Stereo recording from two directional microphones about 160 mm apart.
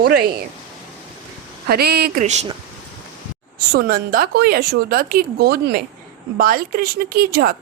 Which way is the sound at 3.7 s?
65° right (ahead or behind).